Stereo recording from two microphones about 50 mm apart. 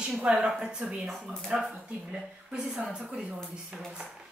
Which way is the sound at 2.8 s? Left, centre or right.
Centre.